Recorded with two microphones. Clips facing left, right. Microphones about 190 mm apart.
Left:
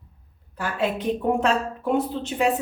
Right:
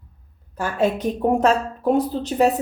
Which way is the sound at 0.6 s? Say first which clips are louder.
Right 4 dB; 45° right (ahead or behind).